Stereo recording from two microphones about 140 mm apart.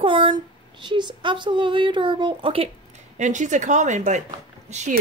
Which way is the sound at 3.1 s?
60° right (ahead or behind).